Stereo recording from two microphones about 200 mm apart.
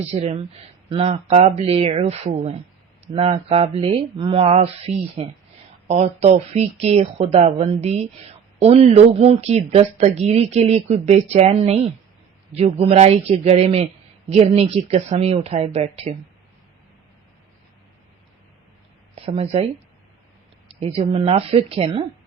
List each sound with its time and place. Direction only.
0.0 s speech: 30° right (ahead or behind)
19.1 s speech: 30° right (ahead or behind)
20.7 s speech: 30° right (ahead or behind)